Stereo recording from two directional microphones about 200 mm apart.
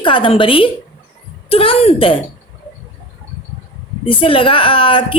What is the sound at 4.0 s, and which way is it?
A woman's voice, 25° left (ahead or behind).